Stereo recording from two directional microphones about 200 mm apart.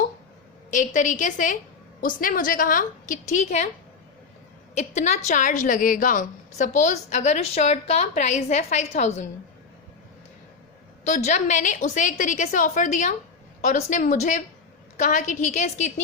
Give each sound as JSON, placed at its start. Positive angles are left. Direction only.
{"t": 0.7, "sound": "a woman's voice", "side_deg": 40}
{"t": 4.8, "sound": "a woman's voice", "side_deg": 35}
{"t": 11.0, "sound": "a woman's voice", "side_deg": 35}